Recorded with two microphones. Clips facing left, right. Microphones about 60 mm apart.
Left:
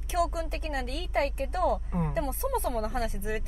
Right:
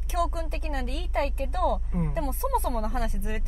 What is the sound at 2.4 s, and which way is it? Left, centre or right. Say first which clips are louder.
Speech: right 4 dB; right.